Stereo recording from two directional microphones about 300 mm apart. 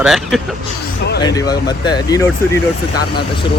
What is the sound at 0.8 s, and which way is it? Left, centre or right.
Speech, left.